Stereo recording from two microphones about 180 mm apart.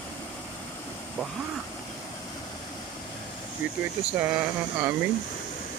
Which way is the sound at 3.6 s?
10° right (ahead or behind).